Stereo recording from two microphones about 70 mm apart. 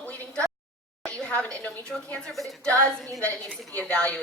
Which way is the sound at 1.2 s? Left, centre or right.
Centre.